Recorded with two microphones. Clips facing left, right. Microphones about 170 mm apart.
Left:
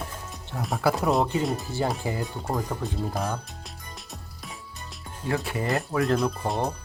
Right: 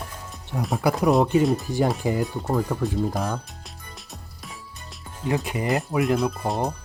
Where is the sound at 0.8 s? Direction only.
15° right (ahead or behind).